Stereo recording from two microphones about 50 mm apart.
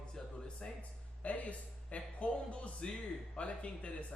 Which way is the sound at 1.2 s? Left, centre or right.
Left.